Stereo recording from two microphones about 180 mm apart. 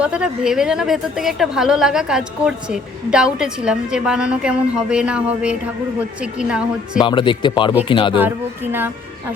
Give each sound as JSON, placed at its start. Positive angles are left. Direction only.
{"t": 0.0, "sound": "a woman's voice", "side_deg": -5}
{"t": 7.0, "sound": "speech", "side_deg": 25}
{"t": 8.2, "sound": "speech", "side_deg": -10}